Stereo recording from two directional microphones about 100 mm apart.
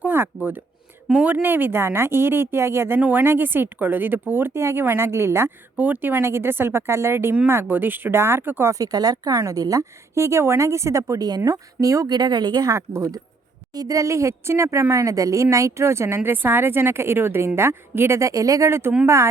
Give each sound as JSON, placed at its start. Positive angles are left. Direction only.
{"t": 0.0, "sound": "a sound", "side_deg": -20}
{"t": 1.0, "sound": "speech", "side_deg": -10}
{"t": 8.7, "sound": "a woman's voice", "side_deg": -40}